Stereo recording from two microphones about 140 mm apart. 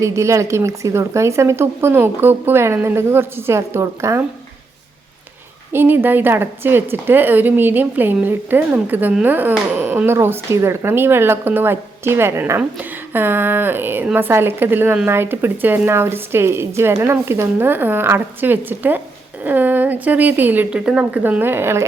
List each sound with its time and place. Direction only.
0.0 s speech: 20° right (ahead or behind)
5.7 s a woman's voice: 15° right (ahead or behind)